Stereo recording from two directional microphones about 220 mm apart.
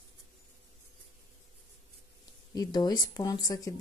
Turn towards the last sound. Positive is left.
turn(degrees=15)  # may be behind; listen again after turning